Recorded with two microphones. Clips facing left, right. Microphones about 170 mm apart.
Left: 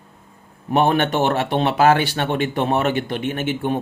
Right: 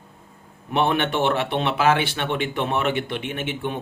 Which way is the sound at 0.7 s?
40° left (ahead or behind).